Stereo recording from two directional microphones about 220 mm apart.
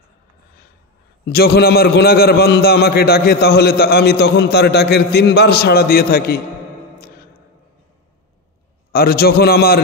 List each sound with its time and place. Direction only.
1.2 s a man's voice: 45° left (ahead or behind)
7.0 s a sound: 45° left (ahead or behind)
8.9 s a man's voice: 45° left (ahead or behind)